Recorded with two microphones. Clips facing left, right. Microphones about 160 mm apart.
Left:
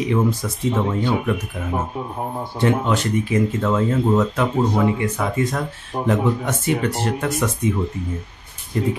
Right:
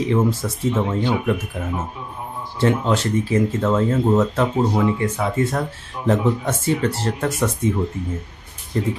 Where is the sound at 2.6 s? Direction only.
35° right (ahead or behind).